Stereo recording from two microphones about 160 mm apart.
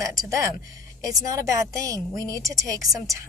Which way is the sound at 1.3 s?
20° right (ahead or behind).